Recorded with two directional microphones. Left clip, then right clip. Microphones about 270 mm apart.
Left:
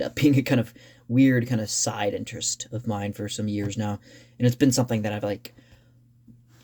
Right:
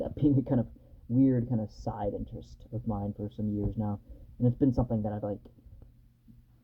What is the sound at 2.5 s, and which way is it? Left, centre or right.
Speech, left.